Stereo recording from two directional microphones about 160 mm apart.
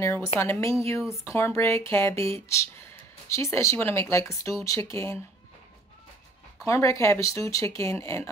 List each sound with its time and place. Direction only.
0.0 s speech: 15° left (ahead or behind)
6.6 s speech: 20° left (ahead or behind)